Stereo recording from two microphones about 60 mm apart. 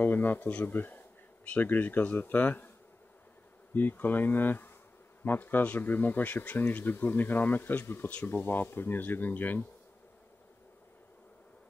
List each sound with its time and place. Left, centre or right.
0.0 s speech: left
3.7 s speech: left